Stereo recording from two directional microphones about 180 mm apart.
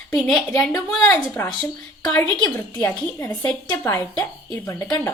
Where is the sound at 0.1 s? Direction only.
Centre (ahead or behind).